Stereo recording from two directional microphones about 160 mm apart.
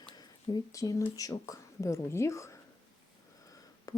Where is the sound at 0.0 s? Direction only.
30° left (ahead or behind).